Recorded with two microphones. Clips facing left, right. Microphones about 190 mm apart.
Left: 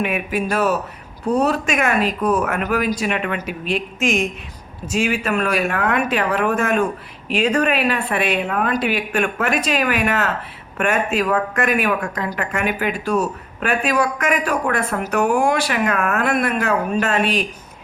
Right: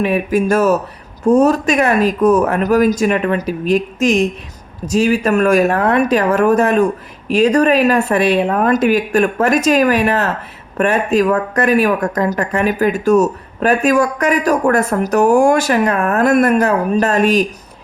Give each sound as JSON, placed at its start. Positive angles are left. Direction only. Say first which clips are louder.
{"t": 0.0, "sound": "speech", "louder": "right 7 dB", "side_deg": -40}